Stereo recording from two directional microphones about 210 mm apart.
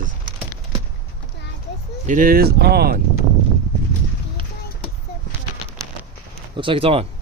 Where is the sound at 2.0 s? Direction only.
40° right (ahead or behind).